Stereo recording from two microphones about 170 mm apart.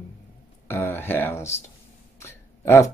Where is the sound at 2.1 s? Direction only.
15° left (ahead or behind).